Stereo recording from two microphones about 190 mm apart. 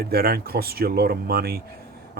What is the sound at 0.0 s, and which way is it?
A man's voice, 55° right (ahead or behind).